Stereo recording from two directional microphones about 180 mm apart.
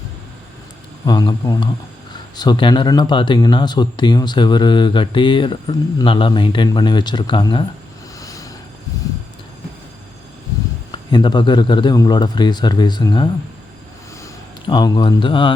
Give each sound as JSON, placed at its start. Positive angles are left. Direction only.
{"t": 1.0, "sound": "speech", "side_deg": 20}
{"t": 8.2, "sound": "vehicle", "side_deg": 20}
{"t": 11.1, "sound": "speech", "side_deg": 25}
{"t": 14.7, "sound": "speech", "side_deg": 25}